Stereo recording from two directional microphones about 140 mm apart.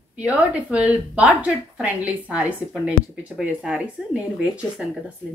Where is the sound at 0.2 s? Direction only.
10° right (ahead or behind).